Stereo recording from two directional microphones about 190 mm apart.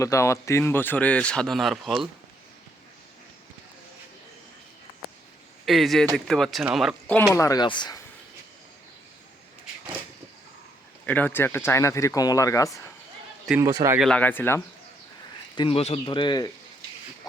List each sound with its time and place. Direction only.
0.0 s a man's voice: 15° left (ahead or behind); by 2.0 s centre (ahead or behind)
5.6 s speech: centre (ahead or behind)
7.3 s speech: 20° left (ahead or behind)
11.0 s a man's voice: 10° left (ahead or behind)
13.6 s speech: 20° right (ahead or behind)
14.0 s a man's voice: 5° left (ahead or behind)
15.5 s speech: 30° left (ahead or behind)